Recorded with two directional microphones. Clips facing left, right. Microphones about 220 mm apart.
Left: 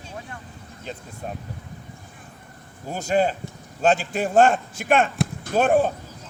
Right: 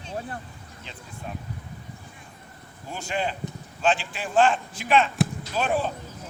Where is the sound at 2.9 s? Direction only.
40° left (ahead or behind).